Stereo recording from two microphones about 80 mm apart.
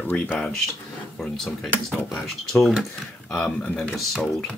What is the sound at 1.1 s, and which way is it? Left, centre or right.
Speech, centre.